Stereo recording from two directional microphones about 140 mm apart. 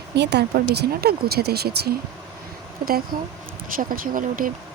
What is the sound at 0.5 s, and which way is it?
Speech, 90° right.